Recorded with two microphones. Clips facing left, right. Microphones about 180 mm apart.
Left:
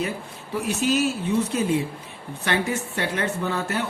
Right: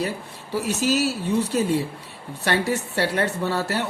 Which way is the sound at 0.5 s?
75° right (ahead or behind).